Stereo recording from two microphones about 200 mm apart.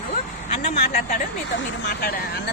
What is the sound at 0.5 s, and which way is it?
Speech, 35° left (ahead or behind).